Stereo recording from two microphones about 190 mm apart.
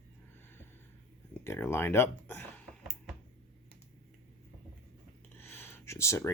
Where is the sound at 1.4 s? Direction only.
15° left (ahead or behind).